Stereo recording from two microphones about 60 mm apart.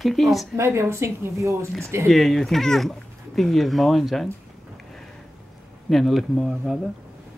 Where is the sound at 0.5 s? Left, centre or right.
Right.